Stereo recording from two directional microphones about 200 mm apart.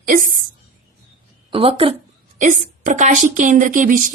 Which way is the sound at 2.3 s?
40° right (ahead or behind).